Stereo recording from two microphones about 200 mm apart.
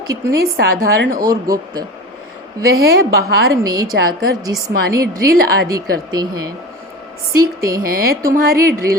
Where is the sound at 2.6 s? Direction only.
50° right (ahead or behind).